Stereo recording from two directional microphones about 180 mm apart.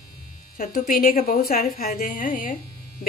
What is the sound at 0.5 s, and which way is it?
A woman's voice, 50° left (ahead or behind).